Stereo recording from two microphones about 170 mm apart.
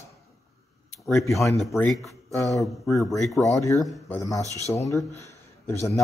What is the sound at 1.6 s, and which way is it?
Speech, centre (ahead or behind).